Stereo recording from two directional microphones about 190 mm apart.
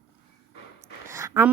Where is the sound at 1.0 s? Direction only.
15° right (ahead or behind).